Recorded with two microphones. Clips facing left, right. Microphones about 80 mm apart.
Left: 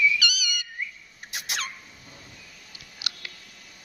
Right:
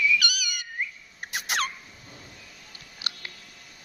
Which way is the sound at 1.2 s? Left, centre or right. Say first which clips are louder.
Right 5 dB; right.